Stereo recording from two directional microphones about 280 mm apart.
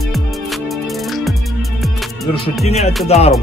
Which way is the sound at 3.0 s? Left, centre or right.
Left.